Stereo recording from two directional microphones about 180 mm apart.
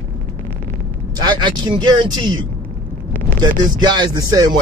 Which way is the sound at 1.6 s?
25° right (ahead or behind).